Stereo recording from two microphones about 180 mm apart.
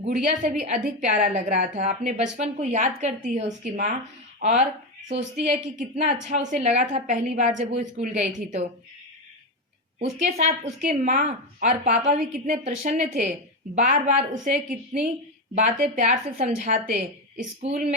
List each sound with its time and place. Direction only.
0.0 s a woman's voice: 40° right (ahead or behind)
10.0 s a woman's voice: 40° right (ahead or behind)